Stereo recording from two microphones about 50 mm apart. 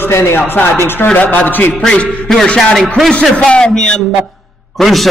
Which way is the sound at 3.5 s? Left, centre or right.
Centre.